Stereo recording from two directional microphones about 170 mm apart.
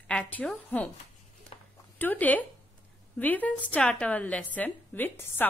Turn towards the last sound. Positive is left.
turn(degrees=10)  # may be behind; listen again after turning